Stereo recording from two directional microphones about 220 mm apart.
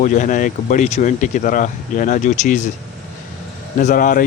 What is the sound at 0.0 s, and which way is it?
Speech, 35° left (ahead or behind).